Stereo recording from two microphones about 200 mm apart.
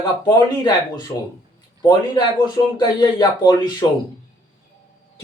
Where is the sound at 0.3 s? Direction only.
20° left (ahead or behind).